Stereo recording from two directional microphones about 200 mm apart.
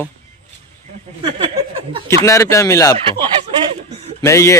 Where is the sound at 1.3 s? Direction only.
25° right (ahead or behind).